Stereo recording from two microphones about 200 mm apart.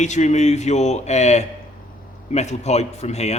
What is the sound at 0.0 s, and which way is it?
A man's voice, 35° left (ahead or behind).